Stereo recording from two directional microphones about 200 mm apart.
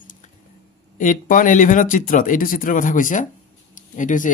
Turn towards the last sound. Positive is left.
turn(degrees=40)  # may be behind; listen again after turning